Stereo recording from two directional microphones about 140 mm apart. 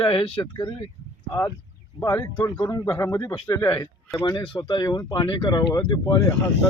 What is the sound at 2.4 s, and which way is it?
Speech, 25° left (ahead or behind).